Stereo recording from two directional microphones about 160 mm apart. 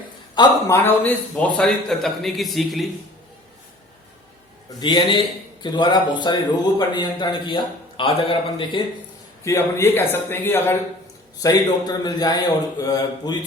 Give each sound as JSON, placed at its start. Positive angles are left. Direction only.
{"t": 0.3, "sound": "a man's voice", "side_deg": 15}
{"t": 4.8, "sound": "a man's voice", "side_deg": 30}
{"t": 9.4, "sound": "a man's voice", "side_deg": 20}
{"t": 11.4, "sound": "a man's voice", "side_deg": 25}